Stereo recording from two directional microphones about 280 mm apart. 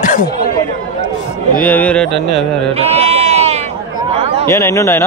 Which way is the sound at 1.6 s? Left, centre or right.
Centre.